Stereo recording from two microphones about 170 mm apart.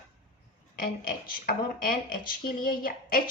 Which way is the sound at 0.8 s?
55° left (ahead or behind).